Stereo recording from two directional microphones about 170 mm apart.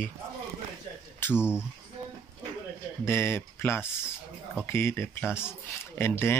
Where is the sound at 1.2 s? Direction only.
15° left (ahead or behind).